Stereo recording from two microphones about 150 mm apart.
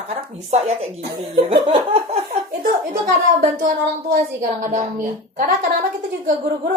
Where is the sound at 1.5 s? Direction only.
35° right (ahead or behind).